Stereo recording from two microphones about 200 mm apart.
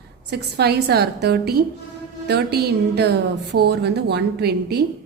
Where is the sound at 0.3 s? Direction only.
55° right (ahead or behind).